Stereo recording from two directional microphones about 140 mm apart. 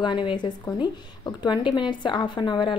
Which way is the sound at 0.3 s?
35° left (ahead or behind).